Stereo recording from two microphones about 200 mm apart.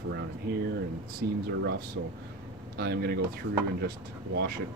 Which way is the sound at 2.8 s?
50° right (ahead or behind).